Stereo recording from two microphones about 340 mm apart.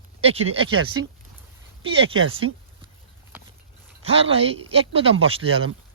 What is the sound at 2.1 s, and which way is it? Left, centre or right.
Speech, right.